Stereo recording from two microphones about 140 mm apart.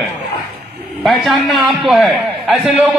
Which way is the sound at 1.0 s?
Centre (ahead or behind).